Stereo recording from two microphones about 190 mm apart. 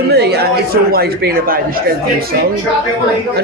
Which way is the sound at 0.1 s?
60° right (ahead or behind).